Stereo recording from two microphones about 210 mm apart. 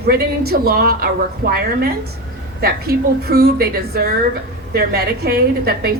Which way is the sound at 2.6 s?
50° right (ahead or behind).